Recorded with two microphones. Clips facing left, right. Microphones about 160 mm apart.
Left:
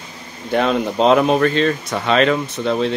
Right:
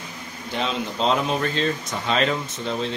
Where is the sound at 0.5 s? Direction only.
55° left (ahead or behind).